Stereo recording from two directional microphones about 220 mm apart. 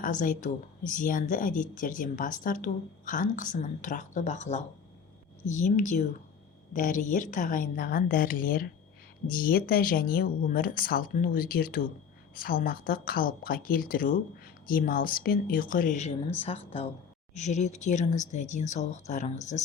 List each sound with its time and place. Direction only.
0.0 s speech: 35° left (ahead or behind)